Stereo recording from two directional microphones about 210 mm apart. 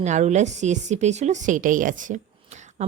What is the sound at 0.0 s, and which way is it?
Speech, 35° right (ahead or behind).